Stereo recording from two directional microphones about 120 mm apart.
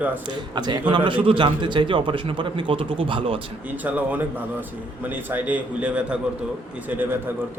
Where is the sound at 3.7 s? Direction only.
15° right (ahead or behind).